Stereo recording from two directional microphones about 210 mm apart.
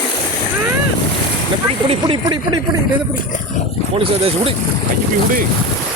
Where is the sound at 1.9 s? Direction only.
25° right (ahead or behind).